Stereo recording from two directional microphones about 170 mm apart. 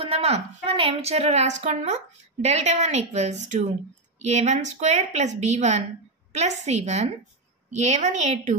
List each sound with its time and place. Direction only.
0.0 s a woman's voice: 35° right (ahead or behind)